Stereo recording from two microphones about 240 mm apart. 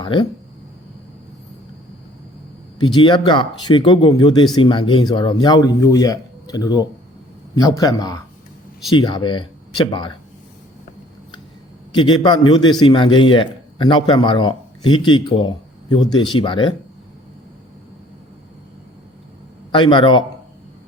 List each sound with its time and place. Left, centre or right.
0.0 s speech: centre
2.7 s a man's voice: centre
11.9 s a man's voice: centre
19.7 s a man's voice: left